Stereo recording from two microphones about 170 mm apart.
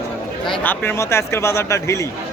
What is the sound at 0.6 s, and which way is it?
Speech, 15° left (ahead or behind).